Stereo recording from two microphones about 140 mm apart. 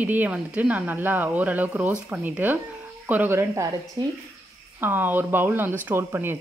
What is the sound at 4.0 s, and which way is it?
Speech, 35° right (ahead or behind).